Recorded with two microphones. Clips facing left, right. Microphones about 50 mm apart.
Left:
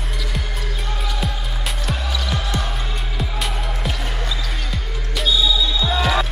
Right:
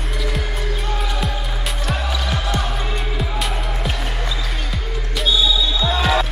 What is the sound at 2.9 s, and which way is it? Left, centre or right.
Music, centre.